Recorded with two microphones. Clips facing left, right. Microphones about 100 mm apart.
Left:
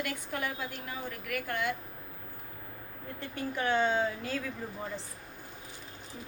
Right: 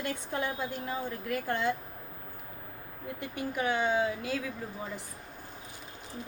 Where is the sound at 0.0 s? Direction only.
25° right (ahead or behind).